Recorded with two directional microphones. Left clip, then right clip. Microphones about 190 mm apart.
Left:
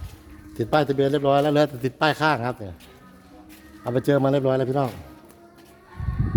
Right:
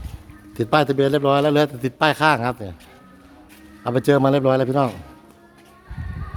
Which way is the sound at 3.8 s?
25° right (ahead or behind).